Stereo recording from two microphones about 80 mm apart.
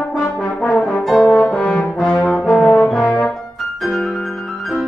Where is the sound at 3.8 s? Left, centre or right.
Centre.